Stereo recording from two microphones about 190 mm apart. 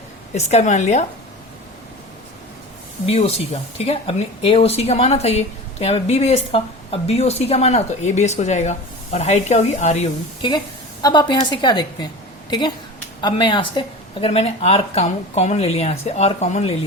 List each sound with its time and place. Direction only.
0.3 s speech: 35° left (ahead or behind)
3.1 s speech: 30° left (ahead or behind)
11.0 s a woman's voice: 25° left (ahead or behind)